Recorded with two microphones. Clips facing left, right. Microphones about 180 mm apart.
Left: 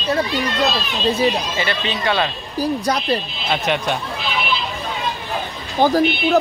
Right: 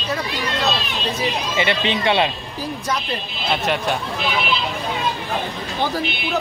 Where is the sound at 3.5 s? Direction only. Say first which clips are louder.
Left 1 dB; centre (ahead or behind).